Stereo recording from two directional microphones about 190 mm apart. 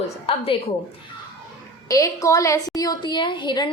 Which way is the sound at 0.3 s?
30° left (ahead or behind).